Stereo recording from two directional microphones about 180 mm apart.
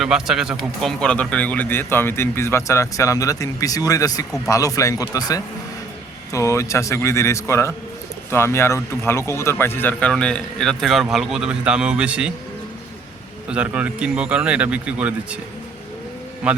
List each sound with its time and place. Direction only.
0.0 s speech: centre (ahead or behind)
13.5 s speech: 5° right (ahead or behind)